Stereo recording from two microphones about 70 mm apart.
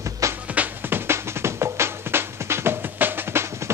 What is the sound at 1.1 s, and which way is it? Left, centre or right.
Music, right.